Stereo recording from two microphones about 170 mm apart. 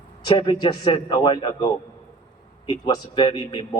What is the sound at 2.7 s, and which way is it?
Speech, 25° left (ahead or behind).